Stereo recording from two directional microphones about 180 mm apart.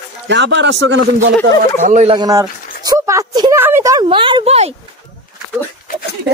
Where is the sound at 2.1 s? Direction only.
20° right (ahead or behind).